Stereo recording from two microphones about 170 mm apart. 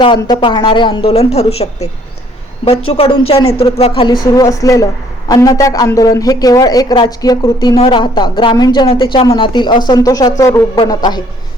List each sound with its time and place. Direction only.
0.2 s speech: 25° left (ahead or behind)
4.4 s a woman's voice: 20° left (ahead or behind)